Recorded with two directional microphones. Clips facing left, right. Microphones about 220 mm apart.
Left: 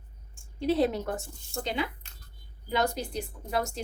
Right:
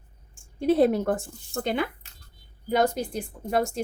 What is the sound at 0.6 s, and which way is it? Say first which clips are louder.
A woman's voice: right 5 dB; 50° right (ahead or behind).